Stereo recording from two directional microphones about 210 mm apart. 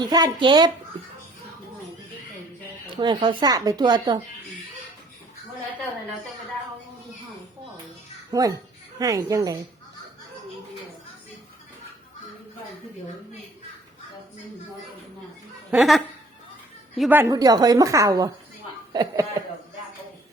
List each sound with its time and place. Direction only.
0.0 s speech: 20° right (ahead or behind)
2.9 s speech: 20° right (ahead or behind)
8.3 s a woman's voice: 15° right (ahead or behind)
15.7 s a woman's voice: centre (ahead or behind); by 19.4 s 15° right (ahead or behind)